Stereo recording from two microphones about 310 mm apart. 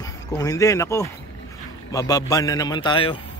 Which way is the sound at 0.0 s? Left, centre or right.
Centre.